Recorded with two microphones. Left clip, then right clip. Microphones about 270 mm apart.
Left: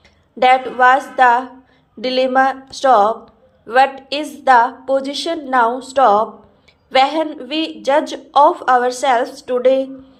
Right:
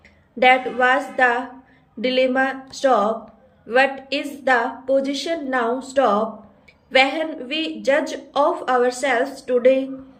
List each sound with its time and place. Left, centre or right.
0.3 s a woman's voice: centre